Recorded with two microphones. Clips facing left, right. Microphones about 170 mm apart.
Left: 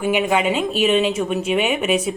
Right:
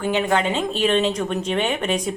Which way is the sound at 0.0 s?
10° left (ahead or behind).